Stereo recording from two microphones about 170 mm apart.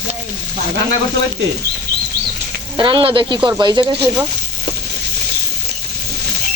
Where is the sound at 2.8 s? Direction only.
30° right (ahead or behind).